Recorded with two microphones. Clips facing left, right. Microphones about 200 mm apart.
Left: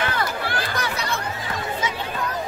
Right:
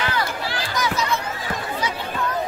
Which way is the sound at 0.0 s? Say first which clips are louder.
Even; 55° left (ahead or behind).